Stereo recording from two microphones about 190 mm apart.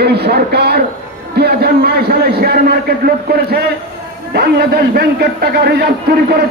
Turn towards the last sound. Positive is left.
turn(degrees=-60)  # may be behind; listen again after turning